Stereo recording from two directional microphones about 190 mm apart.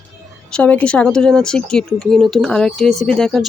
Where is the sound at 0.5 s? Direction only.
5° left (ahead or behind).